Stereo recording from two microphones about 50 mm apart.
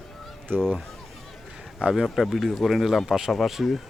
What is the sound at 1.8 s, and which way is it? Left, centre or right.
Speech, right.